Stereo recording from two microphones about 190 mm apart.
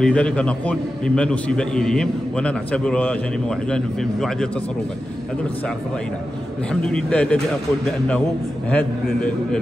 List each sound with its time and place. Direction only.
0.0 s a man's voice: 5° left (ahead or behind)
6.7 s a man's voice: 5° left (ahead or behind)
8.6 s a man's voice: 5° left (ahead or behind)